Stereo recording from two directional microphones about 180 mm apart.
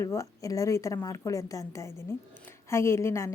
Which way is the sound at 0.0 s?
15° left (ahead or behind).